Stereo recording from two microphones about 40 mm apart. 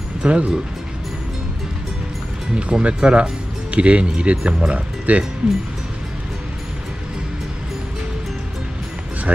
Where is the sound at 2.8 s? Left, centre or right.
Right.